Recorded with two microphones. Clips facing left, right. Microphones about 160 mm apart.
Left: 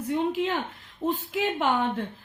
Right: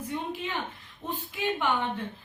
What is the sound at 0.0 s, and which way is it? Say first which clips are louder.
A woman's voice: left 8 dB; 80° left.